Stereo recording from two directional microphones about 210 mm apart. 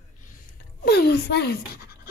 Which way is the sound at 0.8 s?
50° left (ahead or behind).